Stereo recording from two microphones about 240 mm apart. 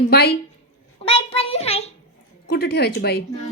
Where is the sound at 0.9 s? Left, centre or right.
Left.